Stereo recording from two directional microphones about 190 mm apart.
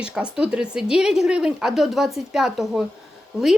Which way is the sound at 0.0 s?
5° right (ahead or behind).